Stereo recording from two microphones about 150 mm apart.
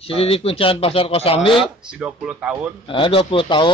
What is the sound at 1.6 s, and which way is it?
Speech, 5° right (ahead or behind).